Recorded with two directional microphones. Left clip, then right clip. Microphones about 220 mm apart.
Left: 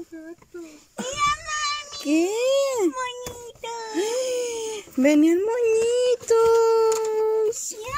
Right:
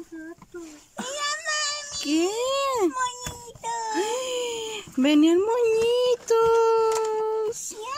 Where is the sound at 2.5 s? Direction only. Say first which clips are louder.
Left 2 dB; 5° right (ahead or behind).